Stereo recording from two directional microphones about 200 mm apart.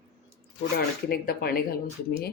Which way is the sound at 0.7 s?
50° left (ahead or behind).